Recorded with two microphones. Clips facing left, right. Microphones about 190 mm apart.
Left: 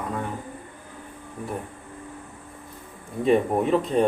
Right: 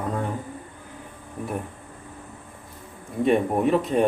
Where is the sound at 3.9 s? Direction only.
Centre (ahead or behind).